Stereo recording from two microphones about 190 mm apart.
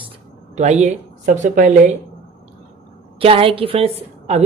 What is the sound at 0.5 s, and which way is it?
Speech, 35° right (ahead or behind).